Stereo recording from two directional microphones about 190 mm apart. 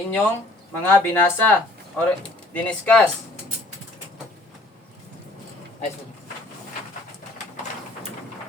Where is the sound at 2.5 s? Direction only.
5° left (ahead or behind).